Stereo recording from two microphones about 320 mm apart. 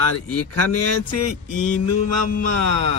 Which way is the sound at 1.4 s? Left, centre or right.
Left.